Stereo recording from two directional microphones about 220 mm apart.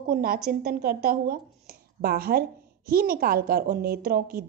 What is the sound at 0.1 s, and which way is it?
A woman's voice, 45° right (ahead or behind).